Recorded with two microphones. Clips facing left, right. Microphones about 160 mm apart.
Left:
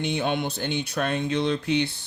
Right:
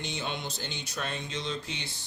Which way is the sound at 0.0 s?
60° left (ahead or behind).